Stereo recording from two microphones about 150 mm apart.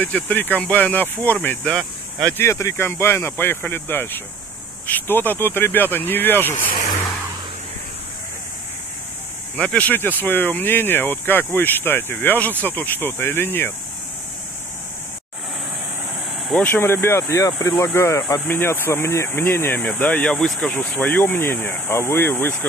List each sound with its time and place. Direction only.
0.0 s speech: 10° left (ahead or behind)
2.3 s speech: 20° left (ahead or behind)
9.6 s speech: 10° left (ahead or behind)
16.6 s speech: 15° left (ahead or behind)